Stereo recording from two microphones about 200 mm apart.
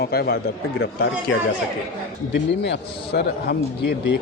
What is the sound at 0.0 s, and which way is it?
Speech, 50° left (ahead or behind).